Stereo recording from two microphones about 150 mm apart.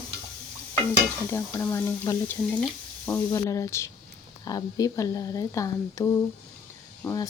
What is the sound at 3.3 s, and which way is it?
Speech, 20° left (ahead or behind).